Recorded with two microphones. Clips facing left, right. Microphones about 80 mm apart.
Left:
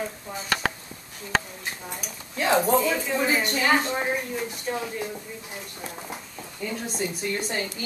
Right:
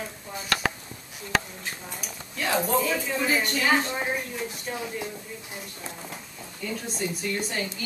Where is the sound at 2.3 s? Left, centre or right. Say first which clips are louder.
Left 4 dB; left.